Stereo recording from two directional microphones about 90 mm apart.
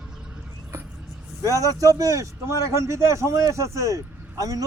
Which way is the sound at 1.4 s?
35° right (ahead or behind).